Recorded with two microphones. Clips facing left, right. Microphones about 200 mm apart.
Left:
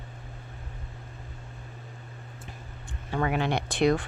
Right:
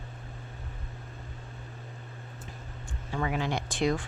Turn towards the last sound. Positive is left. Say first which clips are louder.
# left 4 dB
turn(degrees=65)  # may be behind; listen again after turning